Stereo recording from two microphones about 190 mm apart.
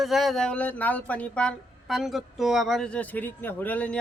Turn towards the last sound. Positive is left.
turn(degrees=5)  # may be behind; listen again after turning